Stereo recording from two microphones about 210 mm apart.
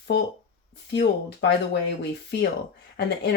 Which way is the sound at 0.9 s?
55° left (ahead or behind).